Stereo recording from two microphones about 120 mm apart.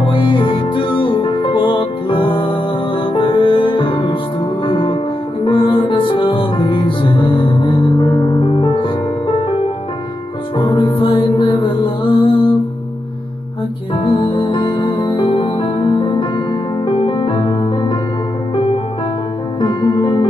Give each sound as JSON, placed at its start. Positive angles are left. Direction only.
{"t": 0.0, "sound": "music", "side_deg": 45}
{"t": 10.6, "sound": "music", "side_deg": 35}
{"t": 13.9, "sound": "music", "side_deg": 45}
{"t": 20.0, "sound": "music", "side_deg": 25}